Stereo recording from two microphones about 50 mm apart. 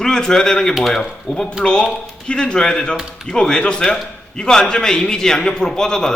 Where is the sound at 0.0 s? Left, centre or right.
Centre.